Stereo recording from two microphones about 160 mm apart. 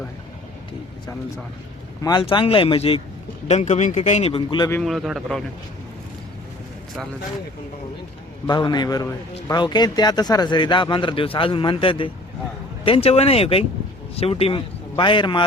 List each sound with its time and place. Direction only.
2.0 s speech: 25° left (ahead or behind)
4.7 s a man's voice: centre (ahead or behind)
8.4 s a man's voice: 25° left (ahead or behind)